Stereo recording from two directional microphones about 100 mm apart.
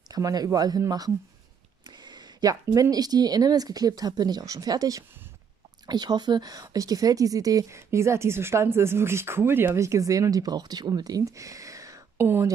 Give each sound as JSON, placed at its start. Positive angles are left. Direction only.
{"t": 0.1, "sound": "speech", "side_deg": -40}